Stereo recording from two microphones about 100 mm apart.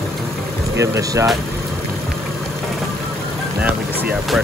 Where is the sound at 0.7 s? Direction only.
30° right (ahead or behind).